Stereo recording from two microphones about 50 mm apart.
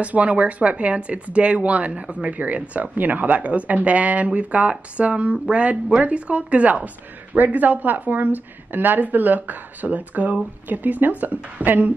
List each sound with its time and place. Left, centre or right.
0.0 s speech: right